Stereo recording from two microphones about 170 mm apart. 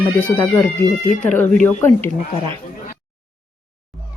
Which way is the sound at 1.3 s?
10° left (ahead or behind).